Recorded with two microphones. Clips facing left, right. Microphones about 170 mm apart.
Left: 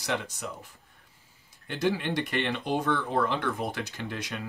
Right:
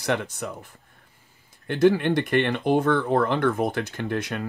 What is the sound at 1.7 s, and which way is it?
Speech, 55° right (ahead or behind).